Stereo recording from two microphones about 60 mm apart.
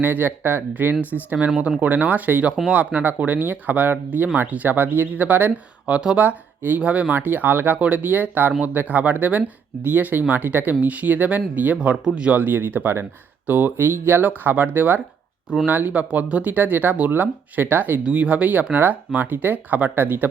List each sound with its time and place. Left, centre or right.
0.0 s speech: right
5.5 s speech: centre
6.1 s speech: right